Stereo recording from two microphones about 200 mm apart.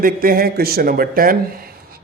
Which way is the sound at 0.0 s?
45° right (ahead or behind).